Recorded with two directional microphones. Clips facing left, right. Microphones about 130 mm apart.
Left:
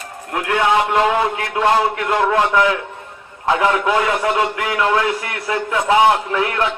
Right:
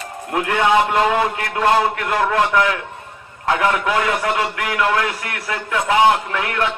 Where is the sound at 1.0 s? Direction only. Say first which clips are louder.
Left 1 dB; 10° left (ahead or behind).